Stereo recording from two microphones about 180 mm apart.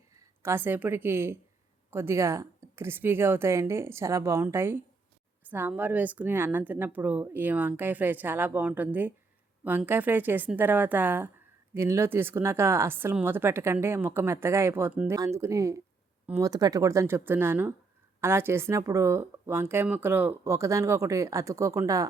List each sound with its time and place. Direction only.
0.1 s a woman's voice: 15° right (ahead or behind)